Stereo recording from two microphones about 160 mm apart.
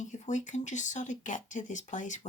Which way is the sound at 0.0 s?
50° left (ahead or behind).